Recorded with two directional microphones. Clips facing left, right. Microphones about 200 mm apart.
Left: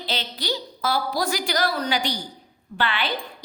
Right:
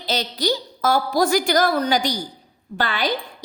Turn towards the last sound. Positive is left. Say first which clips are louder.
# right 3 dB
turn(degrees=-40)  # may be behind; listen again after turning